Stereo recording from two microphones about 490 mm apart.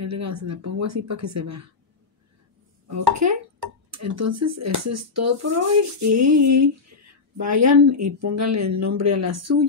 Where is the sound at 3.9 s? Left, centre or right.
Right.